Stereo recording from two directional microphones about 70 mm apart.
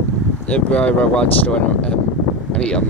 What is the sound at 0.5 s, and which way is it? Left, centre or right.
Speech, centre.